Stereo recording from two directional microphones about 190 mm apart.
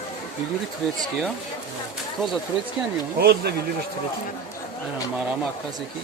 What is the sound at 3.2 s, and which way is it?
Speech, 55° right (ahead or behind).